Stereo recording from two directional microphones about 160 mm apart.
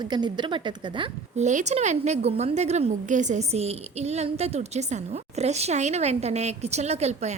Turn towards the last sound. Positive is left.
turn(degrees=-40)  # may be behind; listen again after turning